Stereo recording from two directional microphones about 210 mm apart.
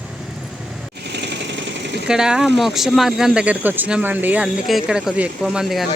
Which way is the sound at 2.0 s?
5° right (ahead or behind).